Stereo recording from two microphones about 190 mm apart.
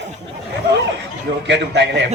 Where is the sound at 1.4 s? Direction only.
65° right (ahead or behind).